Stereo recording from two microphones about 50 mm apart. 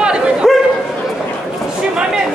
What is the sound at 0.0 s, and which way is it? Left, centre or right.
Bow-wow, centre.